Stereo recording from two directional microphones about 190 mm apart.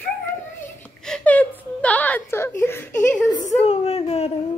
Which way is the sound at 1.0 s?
5° left (ahead or behind).